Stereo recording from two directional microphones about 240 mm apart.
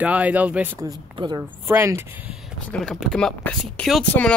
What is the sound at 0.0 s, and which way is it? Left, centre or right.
Speech, centre.